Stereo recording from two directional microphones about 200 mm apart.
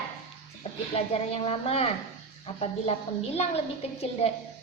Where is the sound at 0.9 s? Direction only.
30° left (ahead or behind).